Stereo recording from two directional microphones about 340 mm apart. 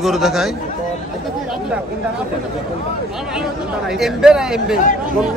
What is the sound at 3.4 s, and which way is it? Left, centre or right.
Speech, centre.